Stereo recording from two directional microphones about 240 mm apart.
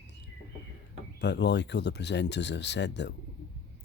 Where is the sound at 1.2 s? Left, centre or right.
Left.